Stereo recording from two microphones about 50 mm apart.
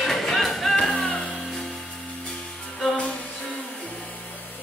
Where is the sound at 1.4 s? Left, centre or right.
Centre.